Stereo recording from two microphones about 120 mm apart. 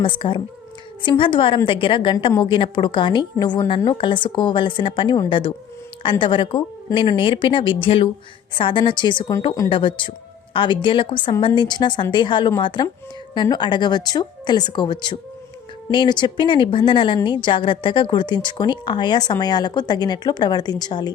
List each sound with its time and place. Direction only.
0.0 s speech: 45° left (ahead or behind)